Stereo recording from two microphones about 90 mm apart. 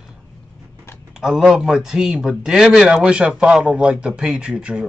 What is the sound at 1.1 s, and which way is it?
A man's voice, 5° right (ahead or behind).